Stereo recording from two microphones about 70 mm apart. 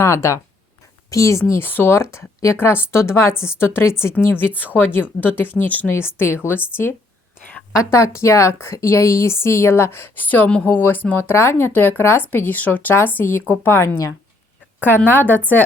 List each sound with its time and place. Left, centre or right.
0.0 s speech: left
1.6 s speech: left
5.9 s speech: left
7.9 s speech: left
14.8 s speech: left